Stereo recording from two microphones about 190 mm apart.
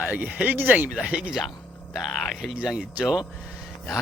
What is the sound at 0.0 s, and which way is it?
Speech, 5° right (ahead or behind).